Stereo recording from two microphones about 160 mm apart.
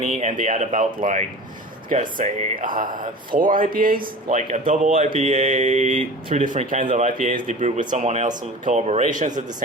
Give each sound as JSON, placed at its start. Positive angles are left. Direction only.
{"t": 0.0, "sound": "speech", "side_deg": -50}